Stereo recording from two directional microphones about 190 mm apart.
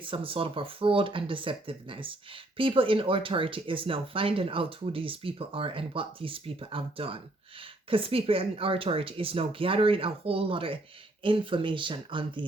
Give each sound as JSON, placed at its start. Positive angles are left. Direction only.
{"t": 0.0, "sound": "speech", "side_deg": -30}